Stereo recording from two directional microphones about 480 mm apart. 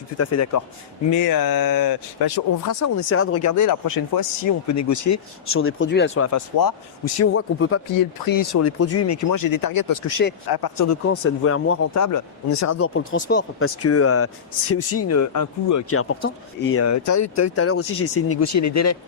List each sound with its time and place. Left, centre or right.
0.2 s speech: left
1.1 s speech: left
2.8 s speech: left
6.3 s speech: left
7.2 s speech: left
7.9 s speech: left
10.1 s speech: left
10.5 s speech: left
11.1 s speech: left